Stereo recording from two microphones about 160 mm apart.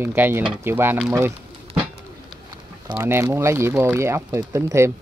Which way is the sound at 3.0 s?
15° right (ahead or behind).